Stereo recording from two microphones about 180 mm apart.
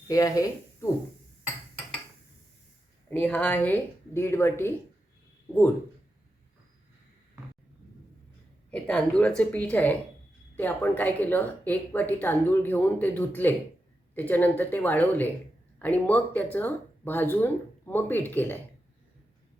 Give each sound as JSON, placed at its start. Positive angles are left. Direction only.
{"t": 0.1, "sound": "speech", "side_deg": 20}
{"t": 3.1, "sound": "speech", "side_deg": 10}
{"t": 8.7, "sound": "speech", "side_deg": 5}